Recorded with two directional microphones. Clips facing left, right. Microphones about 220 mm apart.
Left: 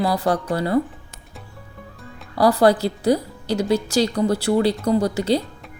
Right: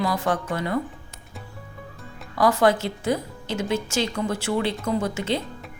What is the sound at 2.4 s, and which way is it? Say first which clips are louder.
Speech: left 4 dB; 35° left (ahead or behind).